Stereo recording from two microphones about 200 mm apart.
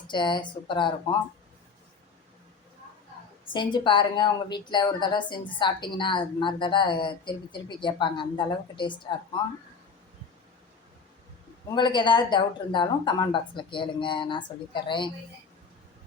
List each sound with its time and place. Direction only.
0.1 s a woman's voice: 25° left (ahead or behind)
3.5 s a woman's voice: 25° left (ahead or behind)
11.7 s a woman's voice: 25° left (ahead or behind)